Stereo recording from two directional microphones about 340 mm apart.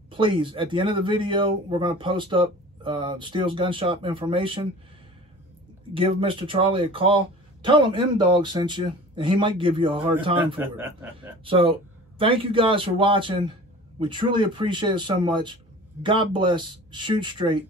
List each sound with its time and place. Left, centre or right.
0.1 s speech: centre
5.9 s speech: centre